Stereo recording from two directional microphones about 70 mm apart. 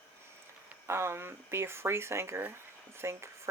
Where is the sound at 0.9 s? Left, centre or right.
Right.